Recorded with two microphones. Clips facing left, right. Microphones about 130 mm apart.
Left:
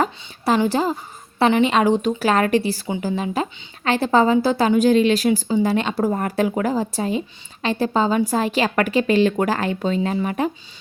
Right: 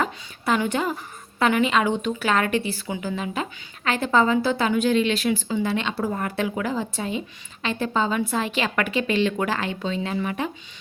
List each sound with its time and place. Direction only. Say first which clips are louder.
0.0 s a woman's voice: left 4 dB; 35° left (ahead or behind)